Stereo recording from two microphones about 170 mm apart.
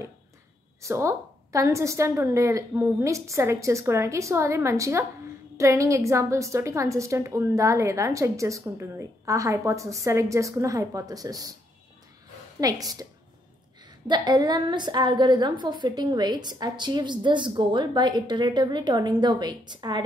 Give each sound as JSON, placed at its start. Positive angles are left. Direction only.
{"t": 0.8, "sound": "a woman's voice", "side_deg": -15}
{"t": 12.5, "sound": "a woman's voice", "side_deg": -20}
{"t": 14.0, "sound": "a woman's voice", "side_deg": -25}